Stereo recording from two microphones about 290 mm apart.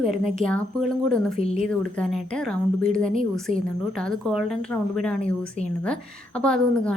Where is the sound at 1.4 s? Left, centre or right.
Left.